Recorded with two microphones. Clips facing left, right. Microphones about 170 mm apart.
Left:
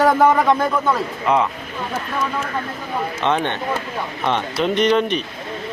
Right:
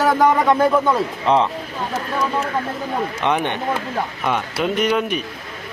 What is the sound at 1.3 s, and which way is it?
Speech, 30° right (ahead or behind).